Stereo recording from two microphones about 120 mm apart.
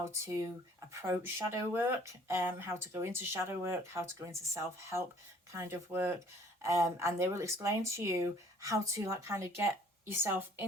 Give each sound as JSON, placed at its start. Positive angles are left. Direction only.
{"t": 0.0, "sound": "speech", "side_deg": -25}